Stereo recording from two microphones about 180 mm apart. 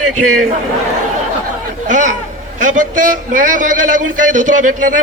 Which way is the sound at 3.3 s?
45° right (ahead or behind).